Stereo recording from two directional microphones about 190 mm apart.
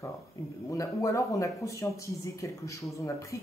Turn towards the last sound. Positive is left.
turn(degrees=15)  # may be behind; listen again after turning